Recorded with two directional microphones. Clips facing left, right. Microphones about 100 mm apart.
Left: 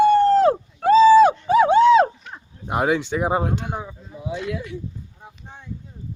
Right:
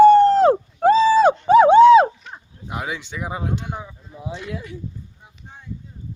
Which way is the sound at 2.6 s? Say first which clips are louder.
Left 8 dB; 50° left (ahead or behind).